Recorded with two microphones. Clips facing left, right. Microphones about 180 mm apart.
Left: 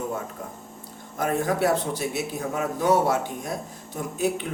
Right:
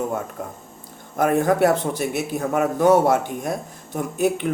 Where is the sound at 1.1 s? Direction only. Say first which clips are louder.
Right 6 dB; 55° right (ahead or behind).